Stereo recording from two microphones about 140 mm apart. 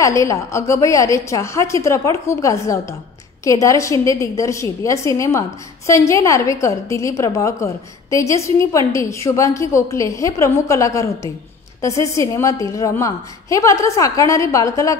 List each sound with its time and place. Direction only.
0.0 s a woman's voice: 20° left (ahead or behind)